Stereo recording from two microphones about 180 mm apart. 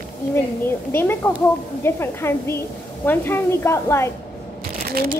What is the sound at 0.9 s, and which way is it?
A woman's voice, 10° left (ahead or behind).